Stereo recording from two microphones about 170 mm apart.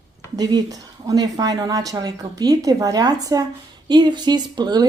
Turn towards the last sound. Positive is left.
turn(degrees=-25)  # may be behind; listen again after turning